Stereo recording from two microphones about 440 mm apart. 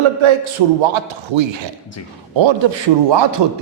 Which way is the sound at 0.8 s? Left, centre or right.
Right.